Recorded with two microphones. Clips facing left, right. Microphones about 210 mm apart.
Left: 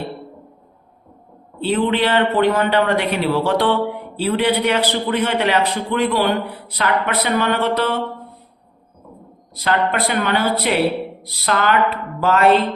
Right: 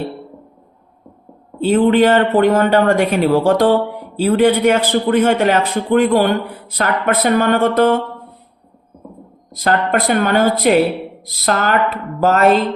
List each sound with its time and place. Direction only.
1.6 s a man's voice: 45° right (ahead or behind)
9.6 s a man's voice: 45° right (ahead or behind)